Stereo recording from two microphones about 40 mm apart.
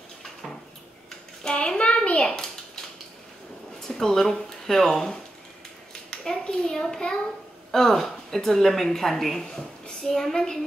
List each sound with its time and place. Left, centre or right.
1.4 s hands: centre
2.1 s a sound: centre
3.8 s speech: centre
6.0 s clapping: centre
7.7 s a woman's voice: centre